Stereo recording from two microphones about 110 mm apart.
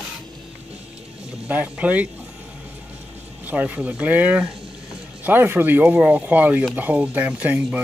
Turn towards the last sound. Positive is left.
turn(degrees=-15)  # may be behind; listen again after turning